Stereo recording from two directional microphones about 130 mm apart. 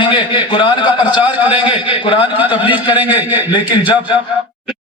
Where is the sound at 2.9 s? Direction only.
15° right (ahead or behind).